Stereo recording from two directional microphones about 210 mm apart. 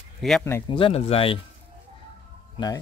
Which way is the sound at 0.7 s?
25° left (ahead or behind).